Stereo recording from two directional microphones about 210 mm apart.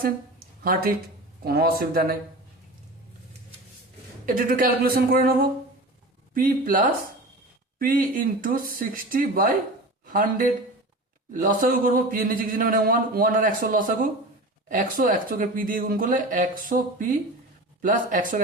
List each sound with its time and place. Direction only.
0.0 s a sound: 45° right (ahead or behind)
1.5 s a man's voice: 45° right (ahead or behind)
4.3 s a man's voice: 45° right (ahead or behind)
17.8 s speech: 40° right (ahead or behind)